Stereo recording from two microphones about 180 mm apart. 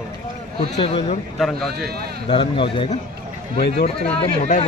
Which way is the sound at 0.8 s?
35° left (ahead or behind).